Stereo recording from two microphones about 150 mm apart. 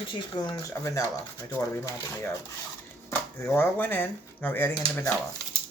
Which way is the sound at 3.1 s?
15° left (ahead or behind).